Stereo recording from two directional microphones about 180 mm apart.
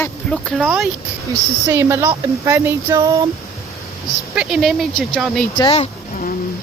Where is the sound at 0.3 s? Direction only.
5° left (ahead or behind).